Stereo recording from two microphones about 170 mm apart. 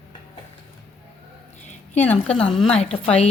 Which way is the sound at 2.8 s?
40° left (ahead or behind).